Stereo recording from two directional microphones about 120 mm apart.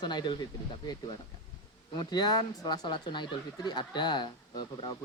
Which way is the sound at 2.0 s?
35° left (ahead or behind).